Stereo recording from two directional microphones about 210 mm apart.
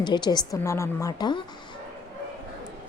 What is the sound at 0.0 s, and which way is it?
A woman's voice, 20° left (ahead or behind).